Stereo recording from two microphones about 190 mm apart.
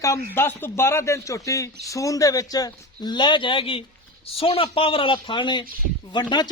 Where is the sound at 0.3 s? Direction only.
10° left (ahead or behind).